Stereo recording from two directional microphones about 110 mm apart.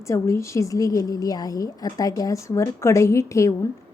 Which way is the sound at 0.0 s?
25° left (ahead or behind).